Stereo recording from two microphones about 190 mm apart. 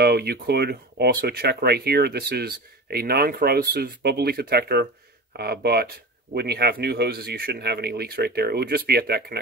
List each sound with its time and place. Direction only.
0.0 s speech: 55° right (ahead or behind)